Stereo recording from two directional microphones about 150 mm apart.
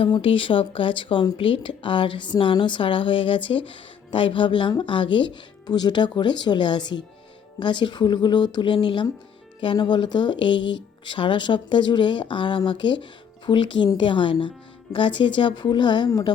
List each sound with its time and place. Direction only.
0.0 s speech: 35° left (ahead or behind)